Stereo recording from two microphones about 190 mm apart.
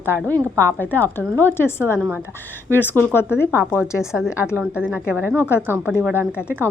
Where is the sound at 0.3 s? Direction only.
15° right (ahead or behind).